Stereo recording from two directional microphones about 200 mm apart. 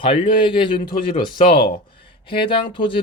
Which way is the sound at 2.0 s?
25° left (ahead or behind).